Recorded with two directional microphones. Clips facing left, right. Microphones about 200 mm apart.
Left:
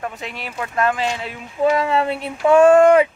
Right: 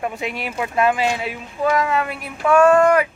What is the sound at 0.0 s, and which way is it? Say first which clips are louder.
Speech: right 4 dB; 10° right (ahead or behind).